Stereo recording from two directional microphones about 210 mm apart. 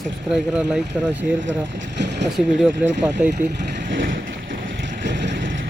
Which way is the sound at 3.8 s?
50° right (ahead or behind).